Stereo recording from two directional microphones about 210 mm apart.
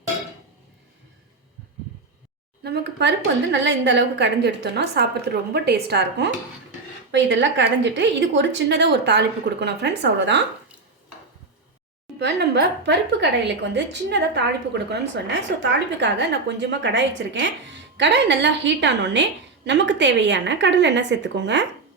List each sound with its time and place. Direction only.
2.6 s a woman's voice: 50° right (ahead or behind)
12.2 s a woman's voice: 50° right (ahead or behind)